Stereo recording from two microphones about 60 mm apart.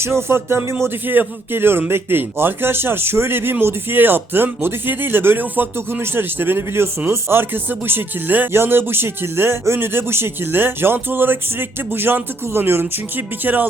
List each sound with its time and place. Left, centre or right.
0.0 s speech: right
12.8 s speech: right